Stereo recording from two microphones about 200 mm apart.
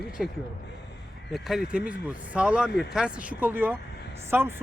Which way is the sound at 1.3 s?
Centre (ahead or behind).